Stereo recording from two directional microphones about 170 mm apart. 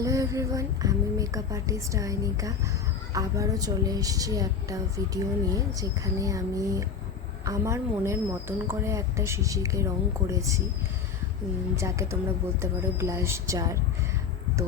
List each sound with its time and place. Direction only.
0.0 s a woman's voice: 20° right (ahead or behind)
11.8 s a woman's voice: 15° right (ahead or behind)